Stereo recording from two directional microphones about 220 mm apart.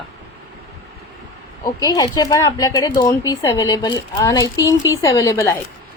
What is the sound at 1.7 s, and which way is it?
A woman's voice, 20° left (ahead or behind).